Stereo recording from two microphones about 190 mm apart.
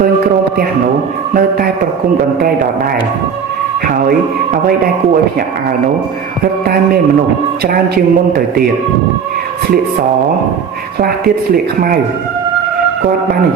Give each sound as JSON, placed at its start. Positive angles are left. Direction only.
{"t": 1.3, "sound": "speech", "side_deg": -50}
{"t": 7.7, "sound": "speech", "side_deg": -55}
{"t": 11.5, "sound": "speech", "side_deg": -50}